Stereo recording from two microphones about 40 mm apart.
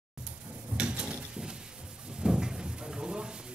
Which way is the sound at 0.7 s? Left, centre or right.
Right.